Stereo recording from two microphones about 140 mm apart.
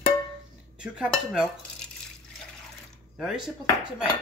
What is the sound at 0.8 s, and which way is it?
Speech, 10° right (ahead or behind).